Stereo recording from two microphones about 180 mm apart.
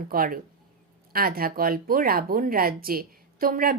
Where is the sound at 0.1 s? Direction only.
55° right (ahead or behind).